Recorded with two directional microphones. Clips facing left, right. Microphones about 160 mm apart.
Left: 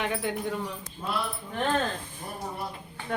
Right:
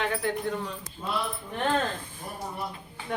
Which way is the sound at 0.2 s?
15° left (ahead or behind).